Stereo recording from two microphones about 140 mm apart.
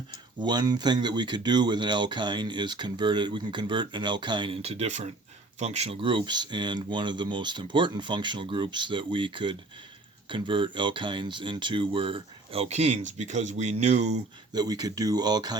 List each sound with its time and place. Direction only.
0.3 s speech: 30° right (ahead or behind); by 14.2 s 55° right (ahead or behind)
14.5 s speech: 30° right (ahead or behind)